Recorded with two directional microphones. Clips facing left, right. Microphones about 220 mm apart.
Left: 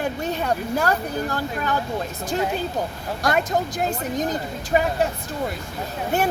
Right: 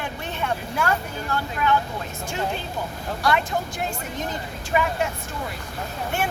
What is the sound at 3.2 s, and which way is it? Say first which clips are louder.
Speech: left 1 dB; 45° left (ahead or behind).